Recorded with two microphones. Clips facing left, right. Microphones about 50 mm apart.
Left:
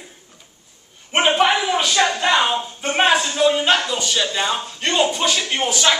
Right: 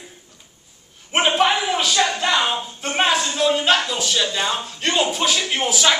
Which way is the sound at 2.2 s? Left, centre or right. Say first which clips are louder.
Left 2 dB; centre.